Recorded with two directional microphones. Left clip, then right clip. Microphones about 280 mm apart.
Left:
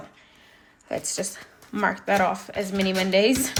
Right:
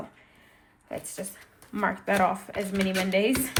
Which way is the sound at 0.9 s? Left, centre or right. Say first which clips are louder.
Left 8 dB; centre.